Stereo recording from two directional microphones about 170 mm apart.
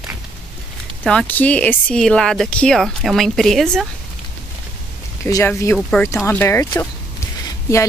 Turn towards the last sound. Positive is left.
turn(degrees=15)  # may be behind; listen again after turning